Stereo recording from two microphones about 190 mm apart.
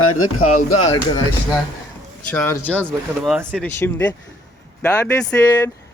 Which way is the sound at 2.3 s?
10° left (ahead or behind).